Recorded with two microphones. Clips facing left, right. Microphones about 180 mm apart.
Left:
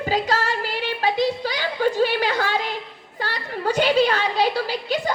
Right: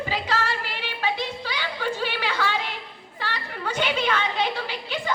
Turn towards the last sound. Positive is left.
turn(degrees=40)  # may be behind; listen again after turning